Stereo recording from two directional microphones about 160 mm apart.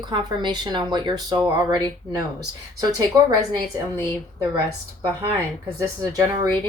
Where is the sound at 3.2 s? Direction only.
20° right (ahead or behind).